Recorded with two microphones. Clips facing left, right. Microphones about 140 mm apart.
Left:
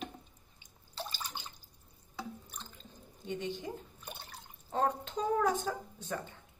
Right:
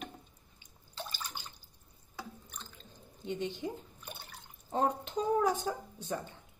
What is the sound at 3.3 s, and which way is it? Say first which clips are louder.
A woman's voice: right 2 dB; 15° right (ahead or behind).